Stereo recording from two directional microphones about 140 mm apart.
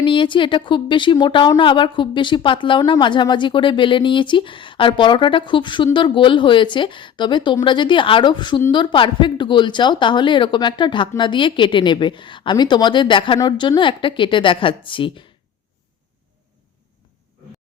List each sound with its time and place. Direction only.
0.0 s a woman's voice: 35° left (ahead or behind)